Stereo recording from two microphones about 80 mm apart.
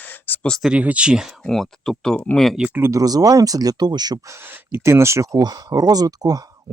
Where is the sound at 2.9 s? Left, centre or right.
Right.